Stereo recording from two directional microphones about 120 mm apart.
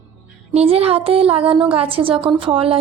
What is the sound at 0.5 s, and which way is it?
A woman's voice, 55° right (ahead or behind).